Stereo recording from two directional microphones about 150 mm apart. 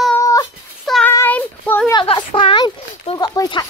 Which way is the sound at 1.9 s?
30° left (ahead or behind).